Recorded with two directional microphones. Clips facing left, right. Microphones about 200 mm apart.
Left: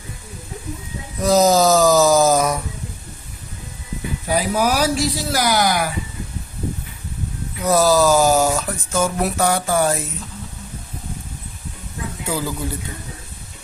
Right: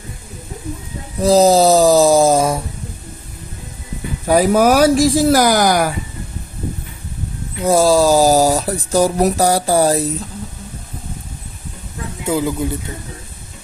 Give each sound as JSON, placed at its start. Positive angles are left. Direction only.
{"t": 1.2, "sound": "speech", "side_deg": -30}
{"t": 4.3, "sound": "speech", "side_deg": -50}
{"t": 7.6, "sound": "speech", "side_deg": -30}
{"t": 12.2, "sound": "speech", "side_deg": -20}